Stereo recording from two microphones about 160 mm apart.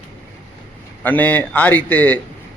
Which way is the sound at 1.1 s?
10° left (ahead or behind).